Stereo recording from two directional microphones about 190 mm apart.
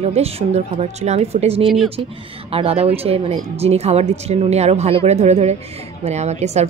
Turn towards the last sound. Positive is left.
turn(degrees=-35)  # may be behind; listen again after turning